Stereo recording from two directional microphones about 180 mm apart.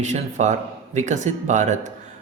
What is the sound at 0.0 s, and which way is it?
Speech, 40° right (ahead or behind).